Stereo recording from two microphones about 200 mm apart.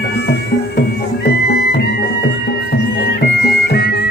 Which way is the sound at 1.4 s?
50° left (ahead or behind).